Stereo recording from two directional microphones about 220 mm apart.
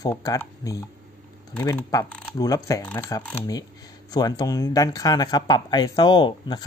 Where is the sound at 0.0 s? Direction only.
15° left (ahead or behind).